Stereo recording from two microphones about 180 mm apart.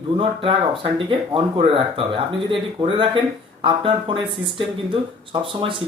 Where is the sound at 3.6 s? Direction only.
30° right (ahead or behind).